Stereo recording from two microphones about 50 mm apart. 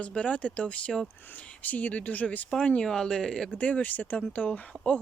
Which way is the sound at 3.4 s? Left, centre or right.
Left.